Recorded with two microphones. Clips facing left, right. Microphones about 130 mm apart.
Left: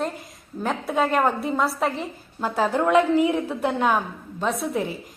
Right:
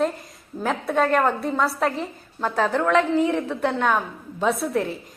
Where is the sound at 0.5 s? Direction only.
30° right (ahead or behind).